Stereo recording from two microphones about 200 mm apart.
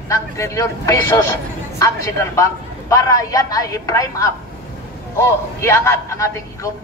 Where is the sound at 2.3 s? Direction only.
15° left (ahead or behind).